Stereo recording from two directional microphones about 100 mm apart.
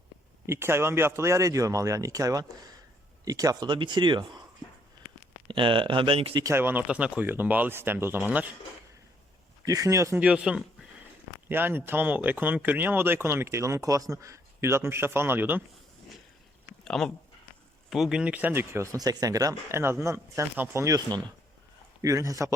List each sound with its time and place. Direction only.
0.4 s speech: 25° right (ahead or behind); by 4.2 s 50° right (ahead or behind)
5.5 s speech: 55° right (ahead or behind)
6.4 s speech: 25° right (ahead or behind)
6.8 s speech: 10° right (ahead or behind)
9.6 s speech: 35° right (ahead or behind)
10.2 s speech: 10° right (ahead or behind)
11.4 s speech: 20° right (ahead or behind)
16.8 s speech: 5° left (ahead or behind); by 21.0 s 30° right (ahead or behind)
22.0 s speech: 35° right (ahead or behind)